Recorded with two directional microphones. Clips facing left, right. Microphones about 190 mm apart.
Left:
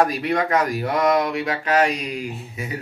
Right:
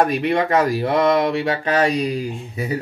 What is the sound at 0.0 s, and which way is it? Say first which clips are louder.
Speech: right 2 dB; 25° right (ahead or behind).